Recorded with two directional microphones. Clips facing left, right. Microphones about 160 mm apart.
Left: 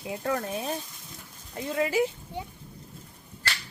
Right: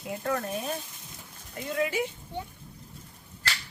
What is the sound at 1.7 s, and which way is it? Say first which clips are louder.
Speech: left 3 dB; 30° left (ahead or behind).